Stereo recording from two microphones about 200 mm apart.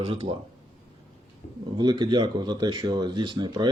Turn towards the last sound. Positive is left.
turn(degrees=-20)  # may be behind; listen again after turning